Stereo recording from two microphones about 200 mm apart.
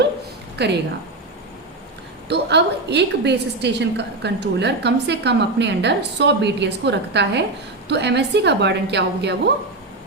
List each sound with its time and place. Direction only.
0.6 s a woman's voice: 55° right (ahead or behind)
2.3 s a woman's voice: 60° right (ahead or behind)